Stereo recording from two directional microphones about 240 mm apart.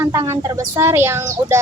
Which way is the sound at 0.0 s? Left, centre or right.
Centre.